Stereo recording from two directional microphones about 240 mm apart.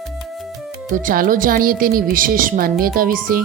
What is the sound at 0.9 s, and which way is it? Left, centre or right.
Speech, right.